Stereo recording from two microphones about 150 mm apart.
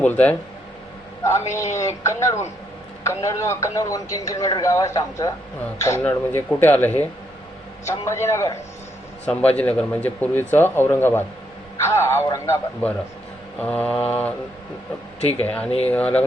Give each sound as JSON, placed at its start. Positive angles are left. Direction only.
{"t": 0.0, "sound": "speech", "side_deg": 10}
{"t": 1.7, "sound": "speech", "side_deg": 20}
{"t": 15.2, "sound": "speech", "side_deg": 45}
{"t": 15.4, "sound": "speech", "side_deg": 10}